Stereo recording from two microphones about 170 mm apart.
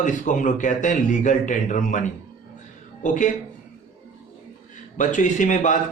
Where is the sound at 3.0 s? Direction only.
50° left (ahead or behind).